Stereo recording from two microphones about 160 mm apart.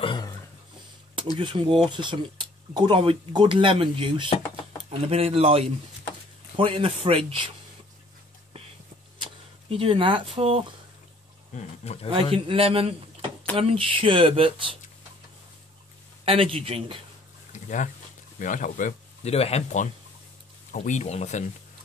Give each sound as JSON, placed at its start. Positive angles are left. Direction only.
{"t": 0.0, "sound": "a sound", "side_deg": 30}
{"t": 1.4, "sound": "speech", "side_deg": -30}
{"t": 9.2, "sound": "speech", "side_deg": -35}
{"t": 11.5, "sound": "speech", "side_deg": 40}
{"t": 12.1, "sound": "speech", "side_deg": -35}
{"t": 16.3, "sound": "speech", "side_deg": -35}
{"t": 17.5, "sound": "a sound", "side_deg": 50}
{"t": 18.4, "sound": "speech", "side_deg": 55}
{"t": 19.3, "sound": "speech", "side_deg": 40}